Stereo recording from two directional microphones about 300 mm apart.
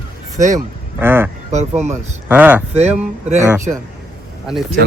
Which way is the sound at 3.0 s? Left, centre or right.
Right.